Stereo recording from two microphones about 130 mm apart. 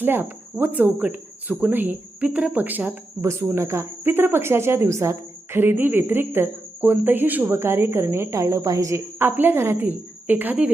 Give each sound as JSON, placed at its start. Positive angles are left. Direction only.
{"t": 0.0, "sound": "speech", "side_deg": -15}